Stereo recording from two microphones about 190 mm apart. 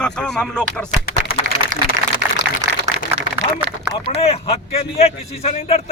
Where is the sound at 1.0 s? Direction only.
50° left (ahead or behind).